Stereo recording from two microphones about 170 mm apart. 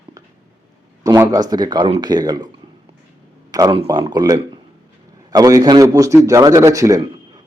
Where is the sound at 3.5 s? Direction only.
20° right (ahead or behind).